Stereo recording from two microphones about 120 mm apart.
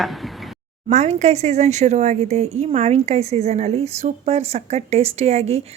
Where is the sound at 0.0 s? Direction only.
Centre (ahead or behind).